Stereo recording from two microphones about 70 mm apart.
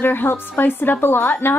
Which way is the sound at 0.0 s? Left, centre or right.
Left.